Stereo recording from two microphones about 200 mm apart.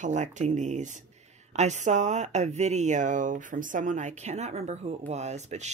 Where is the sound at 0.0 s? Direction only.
35° right (ahead or behind).